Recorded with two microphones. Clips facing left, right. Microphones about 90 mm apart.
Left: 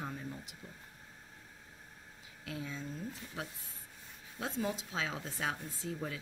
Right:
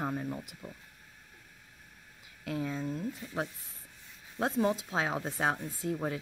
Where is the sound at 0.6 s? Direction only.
40° right (ahead or behind).